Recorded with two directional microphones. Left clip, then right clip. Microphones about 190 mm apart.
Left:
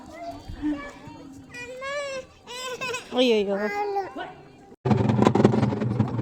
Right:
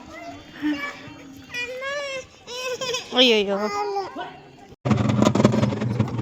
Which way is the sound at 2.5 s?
25° left (ahead or behind).